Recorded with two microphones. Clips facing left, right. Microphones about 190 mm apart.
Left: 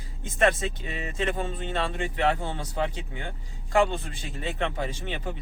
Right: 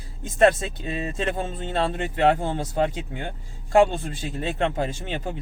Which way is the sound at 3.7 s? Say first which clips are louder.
Right 5 dB; 40° right (ahead or behind).